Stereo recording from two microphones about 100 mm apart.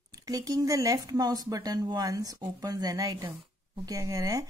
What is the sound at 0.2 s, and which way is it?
Speech, 35° right (ahead or behind).